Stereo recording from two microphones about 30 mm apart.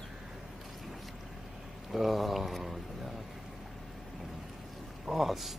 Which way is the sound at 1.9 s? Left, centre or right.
Centre.